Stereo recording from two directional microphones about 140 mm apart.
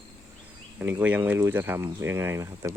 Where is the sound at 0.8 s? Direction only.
15° right (ahead or behind).